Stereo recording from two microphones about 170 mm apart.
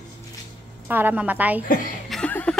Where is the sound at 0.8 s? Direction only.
10° right (ahead or behind).